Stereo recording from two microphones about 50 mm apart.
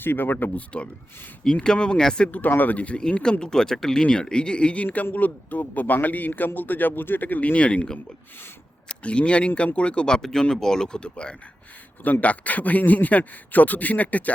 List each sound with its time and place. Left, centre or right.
0.0 s a man's voice: left
1.6 s speech: centre
2.6 s speech: left
3.0 s a man's voice: centre
8.9 s speech: left
10.2 s speech: centre
12.0 s a man's voice: left